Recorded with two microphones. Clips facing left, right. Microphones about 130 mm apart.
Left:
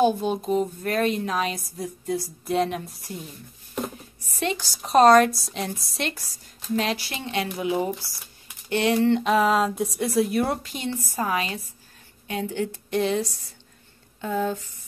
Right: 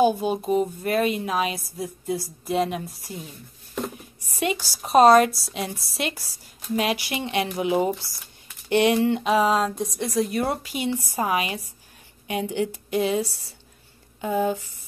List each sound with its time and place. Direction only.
0.0 s speech: 5° right (ahead or behind)
4.4 s speech: 10° right (ahead or behind)